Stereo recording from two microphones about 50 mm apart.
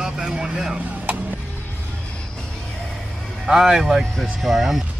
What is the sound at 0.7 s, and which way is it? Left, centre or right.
Chop, right.